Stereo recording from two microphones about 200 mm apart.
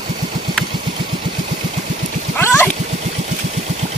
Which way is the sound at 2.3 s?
10° left (ahead or behind).